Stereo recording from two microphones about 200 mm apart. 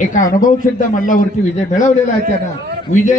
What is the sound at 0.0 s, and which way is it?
A man's voice, 40° left (ahead or behind).